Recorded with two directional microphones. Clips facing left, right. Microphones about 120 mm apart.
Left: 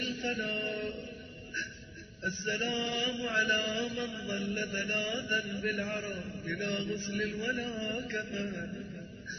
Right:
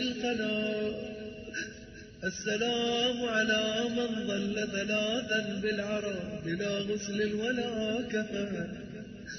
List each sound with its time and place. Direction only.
0.2 s mantra: 15° right (ahead or behind)
2.2 s mantra: 15° right (ahead or behind)